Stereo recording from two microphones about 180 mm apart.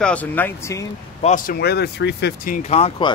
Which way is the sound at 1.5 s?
65° left (ahead or behind).